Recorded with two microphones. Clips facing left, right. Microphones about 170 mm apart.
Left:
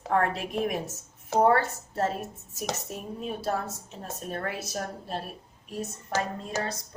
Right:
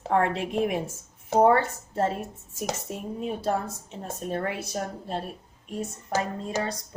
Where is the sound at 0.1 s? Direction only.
20° right (ahead or behind).